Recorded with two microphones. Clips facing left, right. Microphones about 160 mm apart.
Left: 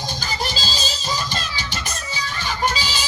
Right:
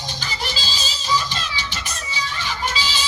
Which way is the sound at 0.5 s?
40° left (ahead or behind).